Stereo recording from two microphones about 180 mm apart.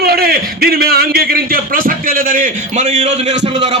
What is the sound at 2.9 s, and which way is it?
Speech, 35° right (ahead or behind).